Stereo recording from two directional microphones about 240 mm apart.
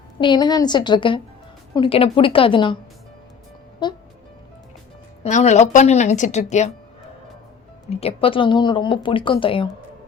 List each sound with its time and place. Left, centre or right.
0.2 s speech: centre
5.2 s speech: left
7.9 s speech: left